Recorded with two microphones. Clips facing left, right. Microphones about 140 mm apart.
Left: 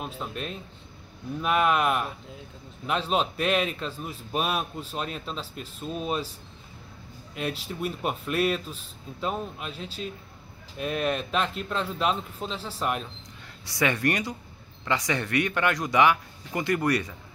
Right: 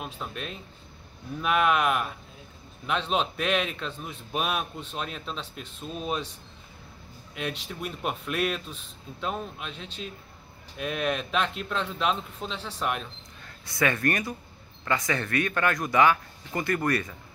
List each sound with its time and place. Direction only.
0.0 s a man's voice: centre (ahead or behind)
7.3 s a man's voice: centre (ahead or behind)
13.7 s speech: 20° left (ahead or behind)